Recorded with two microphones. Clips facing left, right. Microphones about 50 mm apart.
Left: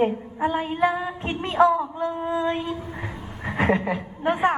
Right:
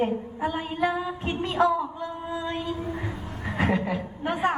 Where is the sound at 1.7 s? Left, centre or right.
Left.